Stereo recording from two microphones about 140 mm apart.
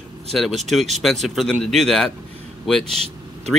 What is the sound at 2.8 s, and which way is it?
Speech, 45° right (ahead or behind).